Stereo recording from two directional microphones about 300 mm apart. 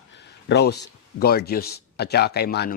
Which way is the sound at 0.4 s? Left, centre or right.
Left.